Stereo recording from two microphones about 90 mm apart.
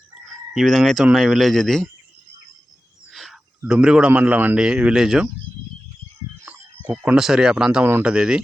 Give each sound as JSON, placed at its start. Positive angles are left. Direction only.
{"t": 0.3, "sound": "speech", "side_deg": 0}
{"t": 3.1, "sound": "a sound", "side_deg": -5}
{"t": 3.7, "sound": "speech", "side_deg": -5}
{"t": 4.1, "sound": "speech", "side_deg": -20}
{"t": 6.4, "sound": "a sound", "side_deg": -15}
{"t": 7.2, "sound": "speech", "side_deg": -5}